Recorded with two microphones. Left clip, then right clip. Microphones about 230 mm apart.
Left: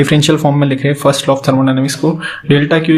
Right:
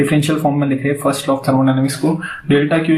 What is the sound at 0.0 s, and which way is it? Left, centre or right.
Speech, left.